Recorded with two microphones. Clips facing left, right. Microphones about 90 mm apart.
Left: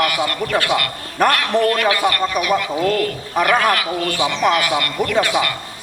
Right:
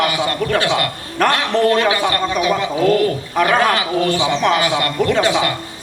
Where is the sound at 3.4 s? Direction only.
10° left (ahead or behind).